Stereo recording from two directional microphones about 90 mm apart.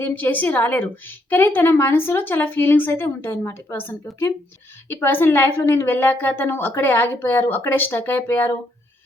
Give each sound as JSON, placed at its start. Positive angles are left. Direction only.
{"t": 0.0, "sound": "a woman's voice", "side_deg": 20}